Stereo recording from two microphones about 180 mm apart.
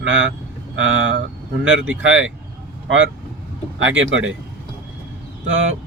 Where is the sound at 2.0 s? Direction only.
90° right.